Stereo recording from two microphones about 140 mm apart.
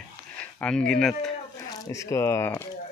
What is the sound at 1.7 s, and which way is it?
Speech, 20° left (ahead or behind).